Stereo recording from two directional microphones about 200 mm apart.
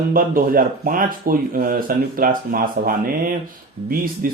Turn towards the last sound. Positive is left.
turn(degrees=-45)  # may be behind; listen again after turning